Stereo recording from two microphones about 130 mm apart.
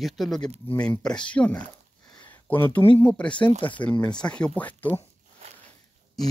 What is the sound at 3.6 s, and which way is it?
Speech, 40° left (ahead or behind).